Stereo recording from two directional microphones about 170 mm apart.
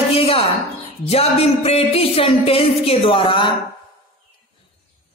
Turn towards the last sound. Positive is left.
turn(degrees=30)  # may be behind; listen again after turning